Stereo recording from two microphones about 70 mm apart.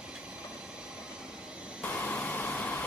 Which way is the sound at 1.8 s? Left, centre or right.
Left.